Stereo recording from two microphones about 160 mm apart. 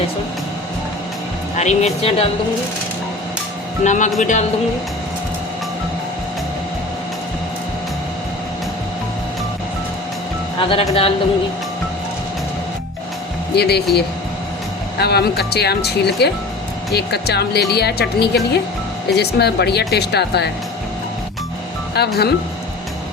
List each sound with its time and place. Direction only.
1.5 s speech: 45° left (ahead or behind)
3.8 s speech: 50° left (ahead or behind)
10.6 s speech: 35° left (ahead or behind)
13.6 s speech: 90° left
21.9 s speech: 90° left